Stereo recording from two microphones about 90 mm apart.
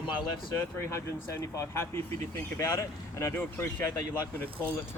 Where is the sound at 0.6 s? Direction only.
30° left (ahead or behind).